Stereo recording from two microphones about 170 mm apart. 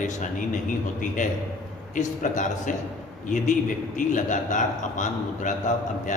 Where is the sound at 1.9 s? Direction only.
45° left (ahead or behind).